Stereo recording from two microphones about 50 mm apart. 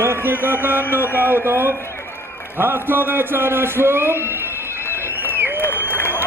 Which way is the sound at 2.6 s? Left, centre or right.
Right.